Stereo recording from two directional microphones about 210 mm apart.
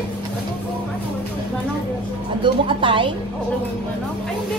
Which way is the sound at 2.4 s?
25° right (ahead or behind).